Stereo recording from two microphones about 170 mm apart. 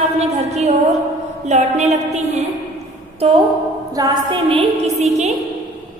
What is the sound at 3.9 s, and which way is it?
A woman's voice, 25° right (ahead or behind).